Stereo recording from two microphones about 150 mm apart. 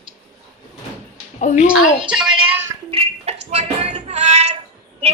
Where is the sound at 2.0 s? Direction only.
5° right (ahead or behind).